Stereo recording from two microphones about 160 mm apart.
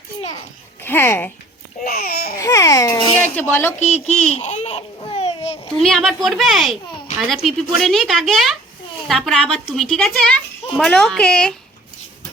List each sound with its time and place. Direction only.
0.8 s a child's voice: 15° left (ahead or behind)
1.8 s babbling: 70° left (ahead or behind)
2.4 s babbling: 20° left (ahead or behind)
3.3 s a child's voice: 15° left (ahead or behind)
3.8 s speech: 45° left (ahead or behind)
4.9 s babbling: 35° left (ahead or behind)
5.7 s a child's voice: 5° left (ahead or behind)